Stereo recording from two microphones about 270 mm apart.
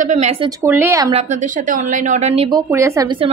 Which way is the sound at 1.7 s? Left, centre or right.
Right.